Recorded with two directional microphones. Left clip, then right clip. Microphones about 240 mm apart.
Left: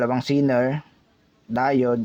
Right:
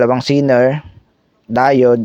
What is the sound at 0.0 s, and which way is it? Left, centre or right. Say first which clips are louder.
Speech: right 9 dB; right.